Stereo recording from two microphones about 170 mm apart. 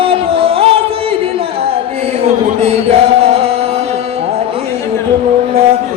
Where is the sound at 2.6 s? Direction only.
35° right (ahead or behind).